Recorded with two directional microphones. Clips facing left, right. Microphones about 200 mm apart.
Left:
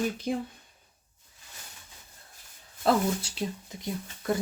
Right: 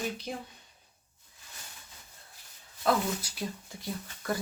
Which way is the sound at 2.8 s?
25° left (ahead or behind).